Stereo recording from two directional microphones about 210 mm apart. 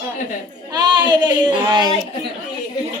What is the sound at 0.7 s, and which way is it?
Child singing, 20° right (ahead or behind).